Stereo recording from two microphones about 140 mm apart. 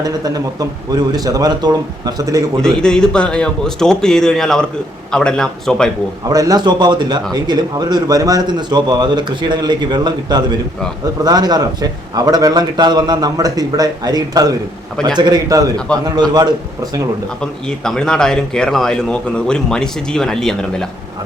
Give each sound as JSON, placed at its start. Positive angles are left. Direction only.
{"t": 0.0, "sound": "a man's voice", "side_deg": -25}
{"t": 2.6, "sound": "speech", "side_deg": 5}
{"t": 6.2, "sound": "a man's voice", "side_deg": -25}
{"t": 17.4, "sound": "speech", "side_deg": 5}